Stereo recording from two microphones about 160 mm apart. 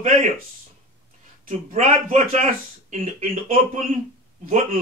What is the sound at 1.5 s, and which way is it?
Speech, 45° right (ahead or behind).